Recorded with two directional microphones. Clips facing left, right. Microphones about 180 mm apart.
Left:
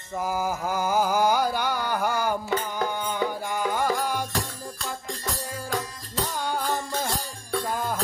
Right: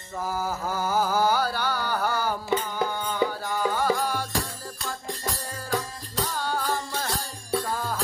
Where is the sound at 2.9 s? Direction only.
15° left (ahead or behind).